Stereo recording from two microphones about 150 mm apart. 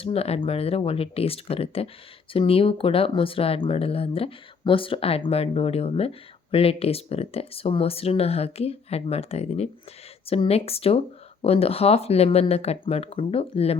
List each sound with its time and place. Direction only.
0.0 s speech: 40° left (ahead or behind)